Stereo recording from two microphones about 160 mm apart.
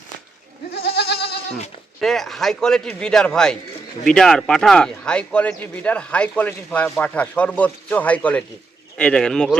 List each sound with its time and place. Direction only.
0.7 s goat: 85° left
2.0 s a man's voice: centre (ahead or behind)